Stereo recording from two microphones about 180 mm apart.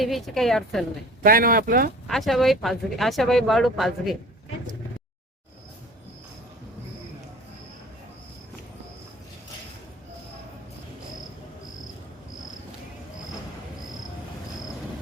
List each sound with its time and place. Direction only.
0.0 s speech: centre (ahead or behind)
1.2 s speech: 55° right (ahead or behind)
2.0 s speech: centre (ahead or behind)